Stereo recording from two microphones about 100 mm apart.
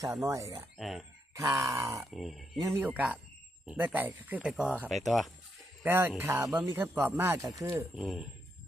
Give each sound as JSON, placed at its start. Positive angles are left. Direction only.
{"t": 0.0, "sound": "a sound", "side_deg": -35}
{"t": 0.8, "sound": "speech", "side_deg": 0}
{"t": 1.4, "sound": "a sound", "side_deg": -30}
{"t": 2.0, "sound": "speech", "side_deg": 0}
{"t": 5.8, "sound": "speech", "side_deg": -20}
{"t": 7.9, "sound": "speech", "side_deg": -5}